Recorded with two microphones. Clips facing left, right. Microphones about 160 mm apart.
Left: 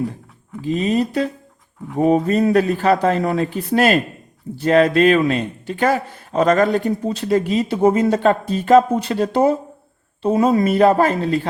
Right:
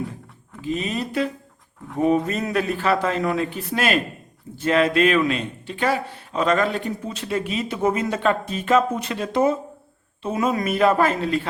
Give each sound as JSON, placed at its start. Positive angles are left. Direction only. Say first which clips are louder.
{"t": 0.6, "sound": "speech", "louder": "left 7 dB", "side_deg": 35}